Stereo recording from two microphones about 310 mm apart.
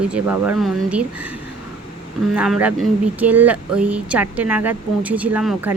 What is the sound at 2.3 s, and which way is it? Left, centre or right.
Speech, centre.